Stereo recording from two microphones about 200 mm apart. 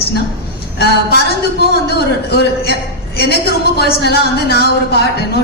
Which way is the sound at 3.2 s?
55° left (ahead or behind).